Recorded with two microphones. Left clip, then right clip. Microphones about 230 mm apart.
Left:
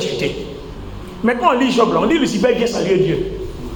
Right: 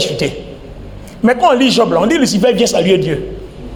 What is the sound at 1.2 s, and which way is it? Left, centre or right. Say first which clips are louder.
A man's voice: right 5 dB; right.